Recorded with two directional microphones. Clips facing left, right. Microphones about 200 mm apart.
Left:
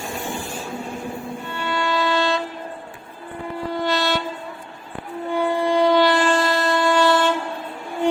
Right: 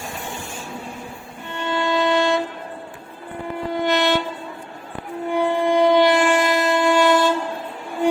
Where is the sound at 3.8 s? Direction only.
20° right (ahead or behind).